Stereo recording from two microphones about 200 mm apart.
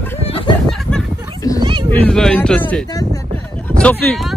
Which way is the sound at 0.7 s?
Centre (ahead or behind).